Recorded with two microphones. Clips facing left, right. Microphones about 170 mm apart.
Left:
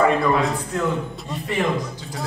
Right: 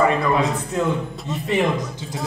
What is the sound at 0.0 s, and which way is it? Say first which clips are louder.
Speech: left 1 dB; centre (ahead or behind).